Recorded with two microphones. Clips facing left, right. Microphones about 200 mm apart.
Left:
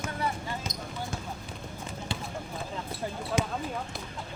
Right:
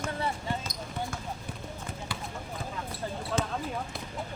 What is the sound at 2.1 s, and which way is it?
Clip-clop, 25° left (ahead or behind).